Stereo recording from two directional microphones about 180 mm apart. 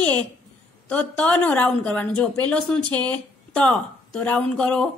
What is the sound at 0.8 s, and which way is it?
A woman's voice, 10° left (ahead or behind).